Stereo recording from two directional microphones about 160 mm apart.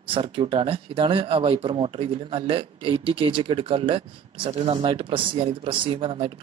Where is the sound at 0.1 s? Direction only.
30° right (ahead or behind).